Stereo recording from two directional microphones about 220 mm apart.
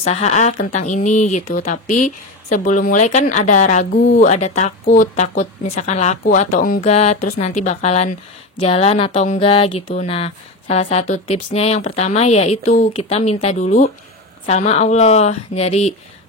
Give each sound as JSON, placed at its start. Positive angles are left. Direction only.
{"t": 0.0, "sound": "speech", "side_deg": 30}